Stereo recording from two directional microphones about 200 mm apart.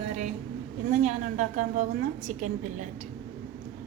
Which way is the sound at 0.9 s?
35° right (ahead or behind).